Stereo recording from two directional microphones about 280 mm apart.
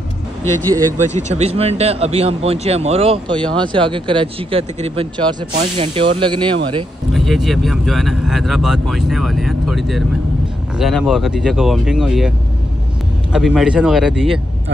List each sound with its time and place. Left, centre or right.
1.3 s speech: right
7.1 s speech: centre
13.3 s speech: centre